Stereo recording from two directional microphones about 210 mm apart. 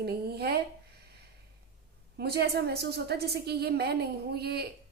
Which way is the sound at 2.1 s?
50° right (ahead or behind).